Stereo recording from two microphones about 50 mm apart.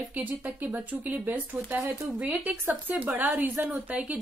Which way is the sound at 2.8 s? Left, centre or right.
Right.